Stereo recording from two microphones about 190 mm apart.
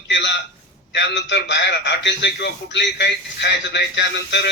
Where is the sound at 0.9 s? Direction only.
65° left (ahead or behind).